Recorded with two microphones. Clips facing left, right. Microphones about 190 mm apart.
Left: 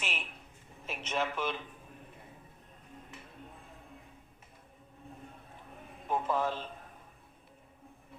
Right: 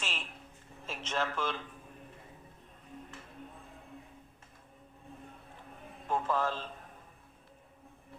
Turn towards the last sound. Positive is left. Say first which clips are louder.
# even
turn(degrees=15)  # may be behind; listen again after turning